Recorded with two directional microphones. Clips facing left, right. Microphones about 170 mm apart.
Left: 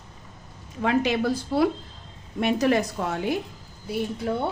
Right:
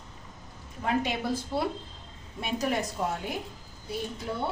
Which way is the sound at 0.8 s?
90° left.